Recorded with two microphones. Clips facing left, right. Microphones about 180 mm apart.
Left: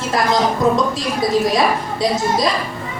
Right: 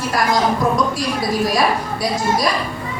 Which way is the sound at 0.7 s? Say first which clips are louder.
Left 1 dB; 25° left (ahead or behind).